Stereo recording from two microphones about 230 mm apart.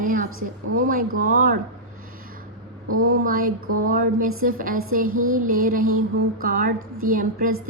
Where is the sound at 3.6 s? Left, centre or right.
Right.